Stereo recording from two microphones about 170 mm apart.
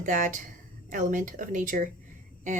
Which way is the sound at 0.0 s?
50° right (ahead or behind).